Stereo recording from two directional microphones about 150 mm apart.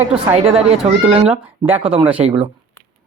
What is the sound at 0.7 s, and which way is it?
Speech, 40° right (ahead or behind).